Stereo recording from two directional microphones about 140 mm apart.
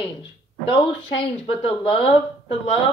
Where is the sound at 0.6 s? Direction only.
40° left (ahead or behind).